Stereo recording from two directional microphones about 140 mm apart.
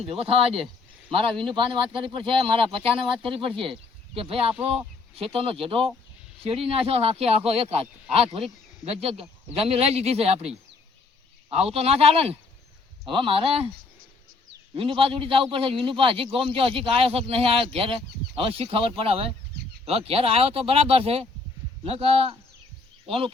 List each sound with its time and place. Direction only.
0.0 s a man's voice: 45° right (ahead or behind)
11.5 s a man's voice: 45° right (ahead or behind)
14.8 s a man's voice: 40° right (ahead or behind)